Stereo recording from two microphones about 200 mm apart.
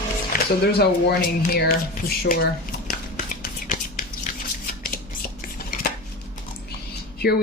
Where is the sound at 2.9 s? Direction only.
40° left (ahead or behind).